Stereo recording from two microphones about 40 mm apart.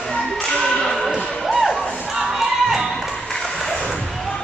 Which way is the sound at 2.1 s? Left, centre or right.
Centre.